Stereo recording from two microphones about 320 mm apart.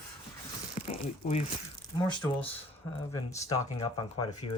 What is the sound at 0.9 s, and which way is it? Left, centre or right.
Speech, centre.